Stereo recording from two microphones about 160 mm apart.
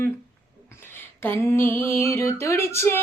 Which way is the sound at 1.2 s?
15° left (ahead or behind).